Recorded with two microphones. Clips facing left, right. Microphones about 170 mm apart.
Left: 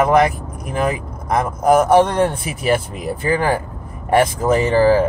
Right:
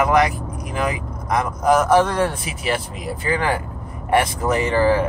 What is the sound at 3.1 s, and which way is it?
Speech, 40° left (ahead or behind).